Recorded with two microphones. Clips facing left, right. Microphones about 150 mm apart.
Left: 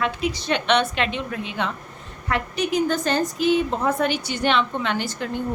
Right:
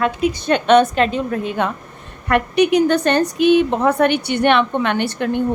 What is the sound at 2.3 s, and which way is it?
A woman's voice, 65° right (ahead or behind).